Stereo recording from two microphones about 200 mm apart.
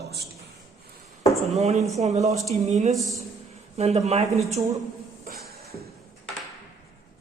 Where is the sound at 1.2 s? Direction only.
Centre (ahead or behind).